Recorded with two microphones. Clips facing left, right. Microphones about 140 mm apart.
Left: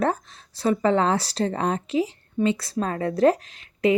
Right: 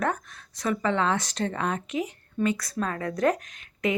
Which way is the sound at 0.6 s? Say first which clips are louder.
Left 5 dB; 35° left (ahead or behind).